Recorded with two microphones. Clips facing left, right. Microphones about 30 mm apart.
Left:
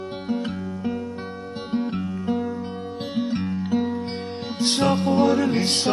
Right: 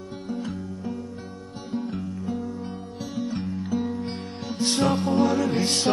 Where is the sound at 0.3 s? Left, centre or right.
Left.